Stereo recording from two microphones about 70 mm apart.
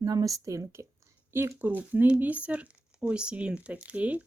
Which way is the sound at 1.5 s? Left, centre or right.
Right.